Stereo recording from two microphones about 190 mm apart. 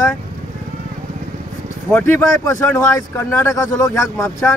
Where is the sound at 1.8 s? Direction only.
5° left (ahead or behind).